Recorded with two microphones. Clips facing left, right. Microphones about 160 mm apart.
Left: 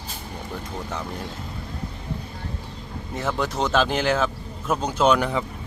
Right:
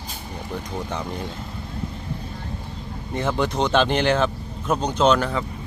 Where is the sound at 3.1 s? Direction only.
Centre (ahead or behind).